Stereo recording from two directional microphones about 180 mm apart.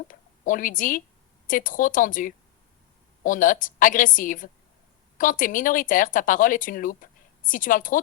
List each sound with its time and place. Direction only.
0.1 s speech: 50° left (ahead or behind)